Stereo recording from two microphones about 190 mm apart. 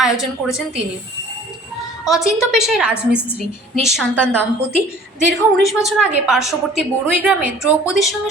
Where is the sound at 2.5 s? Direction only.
Centre (ahead or behind).